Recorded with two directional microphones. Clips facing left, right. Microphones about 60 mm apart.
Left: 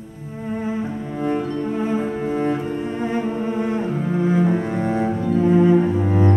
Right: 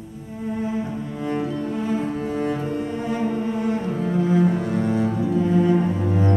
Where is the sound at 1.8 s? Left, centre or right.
Left.